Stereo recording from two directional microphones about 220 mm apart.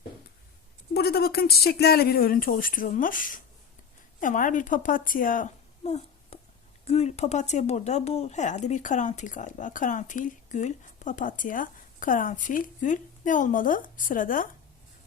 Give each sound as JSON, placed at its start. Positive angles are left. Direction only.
{"t": 0.9, "sound": "a woman's voice", "side_deg": 45}